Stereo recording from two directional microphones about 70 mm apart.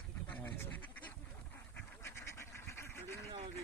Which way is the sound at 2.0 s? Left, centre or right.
Left.